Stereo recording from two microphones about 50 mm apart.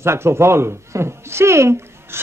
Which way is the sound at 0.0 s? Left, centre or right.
Right.